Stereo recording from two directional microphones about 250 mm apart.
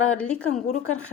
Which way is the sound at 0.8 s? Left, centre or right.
Left.